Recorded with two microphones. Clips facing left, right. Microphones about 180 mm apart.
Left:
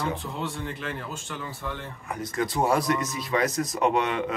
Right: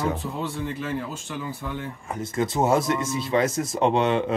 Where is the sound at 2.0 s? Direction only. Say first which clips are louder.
Right 2 dB; 25° right (ahead or behind).